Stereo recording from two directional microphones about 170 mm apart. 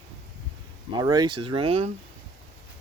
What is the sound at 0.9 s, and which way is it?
Speech, 25° right (ahead or behind).